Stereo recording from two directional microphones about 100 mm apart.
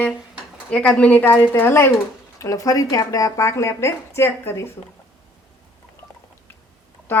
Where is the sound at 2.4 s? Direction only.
35° left (ahead or behind).